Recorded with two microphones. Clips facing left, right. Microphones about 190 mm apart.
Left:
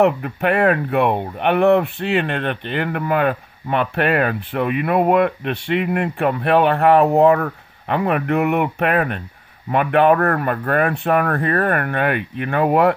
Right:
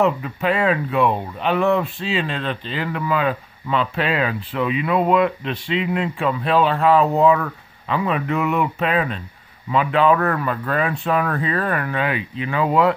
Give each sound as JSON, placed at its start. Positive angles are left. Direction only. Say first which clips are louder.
{"t": 0.0, "sound": "speech", "louder": "left 3 dB", "side_deg": 60}